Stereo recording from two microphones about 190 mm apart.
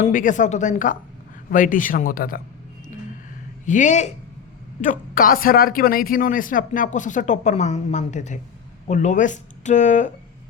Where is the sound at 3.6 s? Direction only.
40° left (ahead or behind).